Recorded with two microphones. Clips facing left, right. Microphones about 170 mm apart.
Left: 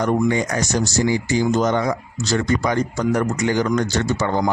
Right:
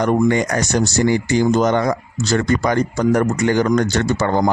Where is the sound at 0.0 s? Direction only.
65° right (ahead or behind).